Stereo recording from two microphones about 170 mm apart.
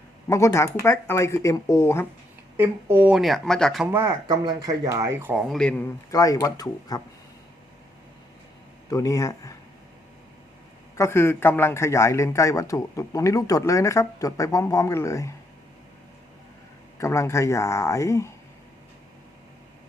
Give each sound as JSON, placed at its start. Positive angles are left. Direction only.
{"t": 0.3, "sound": "a man's voice", "side_deg": 15}
{"t": 2.6, "sound": "speech", "side_deg": -10}
{"t": 3.9, "sound": "speech", "side_deg": -15}
{"t": 5.4, "sound": "speech", "side_deg": 5}
{"t": 6.1, "sound": "speech", "side_deg": 20}
{"t": 8.9, "sound": "speech", "side_deg": 20}
{"t": 10.9, "sound": "a man's voice", "side_deg": 15}
{"t": 17.0, "sound": "a man's voice", "side_deg": 15}